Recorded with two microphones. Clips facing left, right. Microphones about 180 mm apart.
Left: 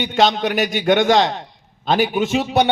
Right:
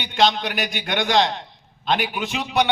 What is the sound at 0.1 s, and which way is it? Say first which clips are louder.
A man's voice: left 2 dB; 45° left (ahead or behind).